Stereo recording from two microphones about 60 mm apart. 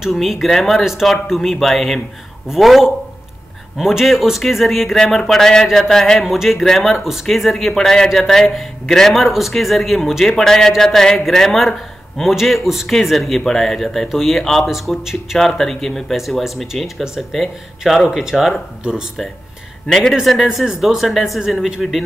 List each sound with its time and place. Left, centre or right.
0.0 s speech: centre
14.7 s a man's voice: centre
15.3 s speech: centre
19.9 s speech: centre
20.2 s speech: centre